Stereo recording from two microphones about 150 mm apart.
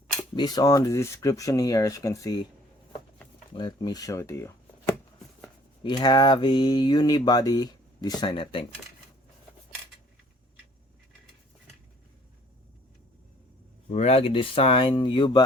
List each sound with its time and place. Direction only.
0.3 s speech: 25° left (ahead or behind)
3.5 s speech: 30° left (ahead or behind)
5.8 s speech: 30° left (ahead or behind)
13.9 s speech: 45° left (ahead or behind)